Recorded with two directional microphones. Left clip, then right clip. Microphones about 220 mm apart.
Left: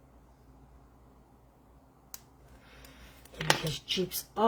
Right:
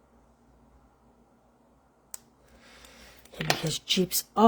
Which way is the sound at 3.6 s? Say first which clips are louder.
Right 5 dB; 50° right (ahead or behind).